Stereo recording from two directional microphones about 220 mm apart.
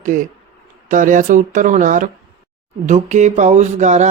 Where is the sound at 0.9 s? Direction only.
35° right (ahead or behind).